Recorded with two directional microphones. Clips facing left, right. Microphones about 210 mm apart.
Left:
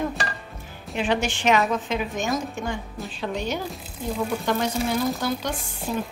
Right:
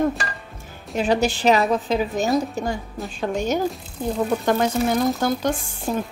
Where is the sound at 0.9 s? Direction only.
40° right (ahead or behind).